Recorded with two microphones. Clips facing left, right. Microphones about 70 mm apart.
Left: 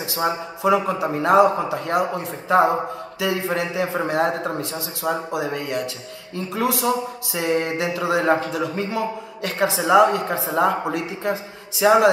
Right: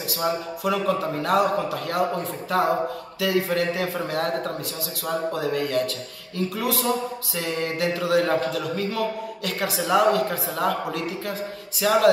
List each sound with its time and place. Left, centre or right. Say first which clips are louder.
0.2 s speech: left 3 dB; left